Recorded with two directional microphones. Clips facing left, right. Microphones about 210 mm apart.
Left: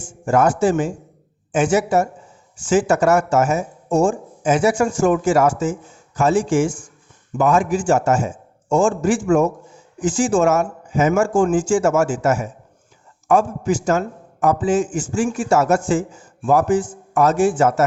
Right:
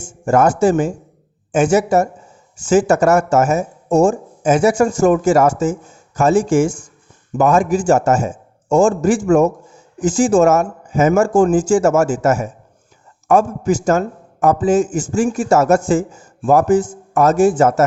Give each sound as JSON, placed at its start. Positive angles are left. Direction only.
{"t": 0.3, "sound": "speech", "side_deg": -45}